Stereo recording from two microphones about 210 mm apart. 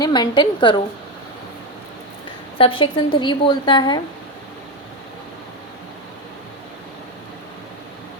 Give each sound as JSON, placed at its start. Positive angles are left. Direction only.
{"t": 0.0, "sound": "a woman's voice", "side_deg": 20}
{"t": 2.6, "sound": "a woman's voice", "side_deg": 25}